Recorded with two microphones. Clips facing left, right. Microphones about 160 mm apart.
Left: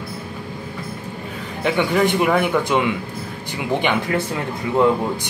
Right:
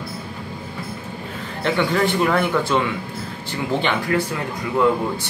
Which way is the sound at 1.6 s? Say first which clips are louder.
Left 2 dB; 15° left (ahead or behind).